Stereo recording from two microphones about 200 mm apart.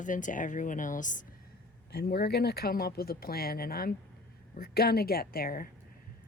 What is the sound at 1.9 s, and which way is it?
Speech, 50° left (ahead or behind).